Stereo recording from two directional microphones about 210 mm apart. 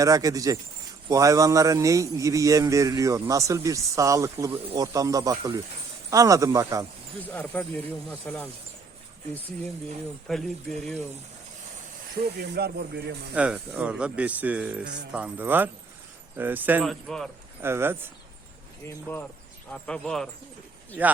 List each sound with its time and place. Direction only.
0.0 s a man's voice: 15° right (ahead or behind)
7.3 s speech: 10° left (ahead or behind)
10.3 s speech: centre (ahead or behind)
12.4 s speech: 50° right (ahead or behind)
13.3 s a man's voice: 5° right (ahead or behind)
17.6 s a man's voice: 10° right (ahead or behind)
18.9 s speech: 10° left (ahead or behind)